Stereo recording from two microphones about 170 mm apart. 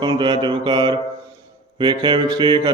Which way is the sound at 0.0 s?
25° right (ahead or behind).